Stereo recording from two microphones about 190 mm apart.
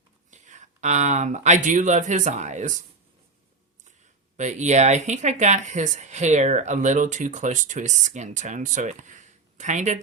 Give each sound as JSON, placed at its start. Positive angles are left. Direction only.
{"t": 0.3, "sound": "speech", "side_deg": -40}
{"t": 4.4, "sound": "speech", "side_deg": -40}